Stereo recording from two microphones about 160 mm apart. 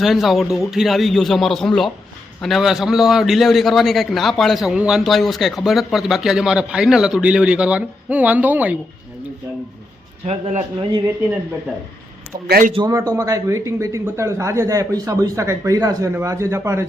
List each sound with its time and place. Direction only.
0.0 s a man's voice: centre (ahead or behind)
10.2 s speech: 40° right (ahead or behind)
12.5 s a man's voice: 65° right (ahead or behind)
12.7 s speech: 25° right (ahead or behind)